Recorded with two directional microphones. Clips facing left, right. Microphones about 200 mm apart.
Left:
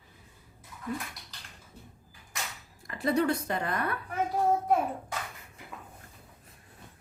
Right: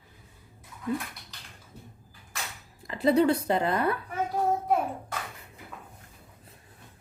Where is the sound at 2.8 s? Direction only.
25° right (ahead or behind).